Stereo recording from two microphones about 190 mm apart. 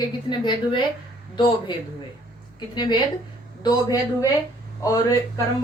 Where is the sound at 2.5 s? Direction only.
20° left (ahead or behind).